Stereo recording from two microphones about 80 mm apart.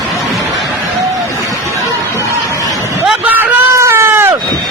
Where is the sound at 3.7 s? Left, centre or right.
Right.